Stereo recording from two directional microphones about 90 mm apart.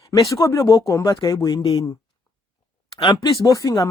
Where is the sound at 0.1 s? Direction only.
40° left (ahead or behind).